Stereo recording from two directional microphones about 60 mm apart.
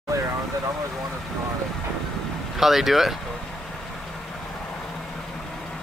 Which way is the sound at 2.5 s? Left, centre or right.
Centre.